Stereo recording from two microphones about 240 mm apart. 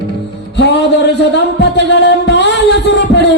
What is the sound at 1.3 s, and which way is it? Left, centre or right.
Music, left.